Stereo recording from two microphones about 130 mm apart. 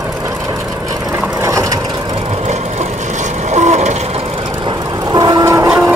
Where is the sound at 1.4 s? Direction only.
25° right (ahead or behind).